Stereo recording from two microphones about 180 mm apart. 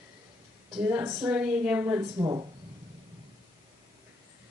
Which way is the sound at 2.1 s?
20° right (ahead or behind).